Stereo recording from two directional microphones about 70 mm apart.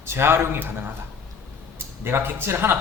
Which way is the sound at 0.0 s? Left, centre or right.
Right.